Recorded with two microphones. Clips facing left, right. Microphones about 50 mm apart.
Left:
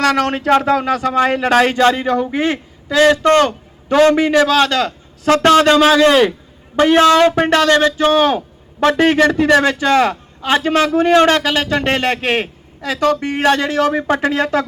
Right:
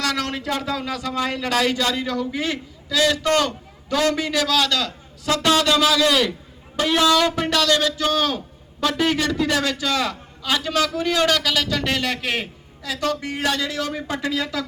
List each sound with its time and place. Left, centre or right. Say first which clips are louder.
0.0 s speech: left 9 dB; left
8.4 s speech: left 8 dB; left